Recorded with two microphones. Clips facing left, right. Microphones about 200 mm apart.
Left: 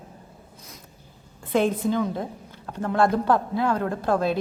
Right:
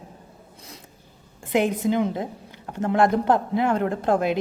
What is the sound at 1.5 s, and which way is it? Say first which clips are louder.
A woman's voice: right 1 dB; 15° right (ahead or behind).